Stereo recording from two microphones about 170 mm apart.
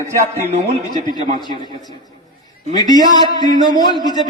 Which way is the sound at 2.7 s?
25° left (ahead or behind).